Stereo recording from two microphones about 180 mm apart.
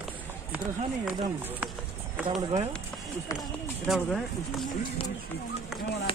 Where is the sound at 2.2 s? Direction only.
35° right (ahead or behind).